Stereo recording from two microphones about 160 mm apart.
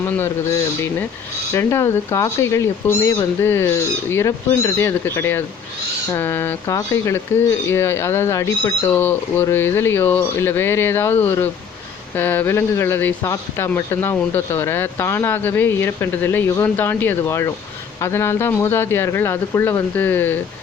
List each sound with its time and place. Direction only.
1.5 s speech: 15° left (ahead or behind)